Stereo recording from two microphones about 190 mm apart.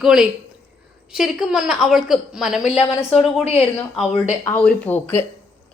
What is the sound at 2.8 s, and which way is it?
Speech, 15° left (ahead or behind).